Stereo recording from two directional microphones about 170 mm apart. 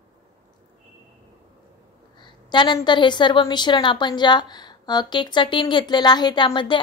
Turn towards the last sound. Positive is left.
turn(degrees=30)  # may be behind; listen again after turning